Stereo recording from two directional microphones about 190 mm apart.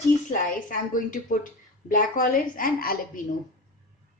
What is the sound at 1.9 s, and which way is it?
A woman's voice, 45° left (ahead or behind).